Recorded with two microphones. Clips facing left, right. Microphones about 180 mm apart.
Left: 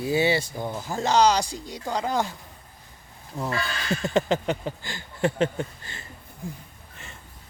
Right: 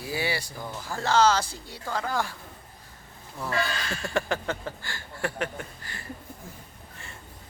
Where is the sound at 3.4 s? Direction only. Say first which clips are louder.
Even; 20° left (ahead or behind).